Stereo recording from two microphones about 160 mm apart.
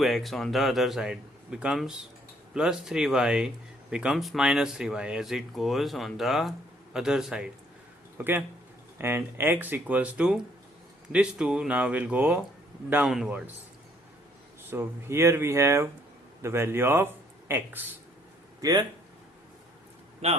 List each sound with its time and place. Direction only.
0.0 s speech: centre (ahead or behind)
14.7 s speech: 15° right (ahead or behind)
18.6 s speech: 25° right (ahead or behind)
20.2 s a man's voice: 40° right (ahead or behind)